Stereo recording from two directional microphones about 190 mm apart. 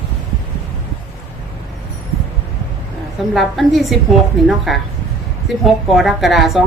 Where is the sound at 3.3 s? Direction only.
Centre (ahead or behind).